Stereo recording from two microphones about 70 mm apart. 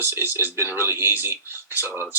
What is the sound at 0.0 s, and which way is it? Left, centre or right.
Speech, right.